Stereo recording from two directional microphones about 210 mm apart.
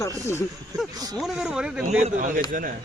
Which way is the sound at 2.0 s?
40° right (ahead or behind).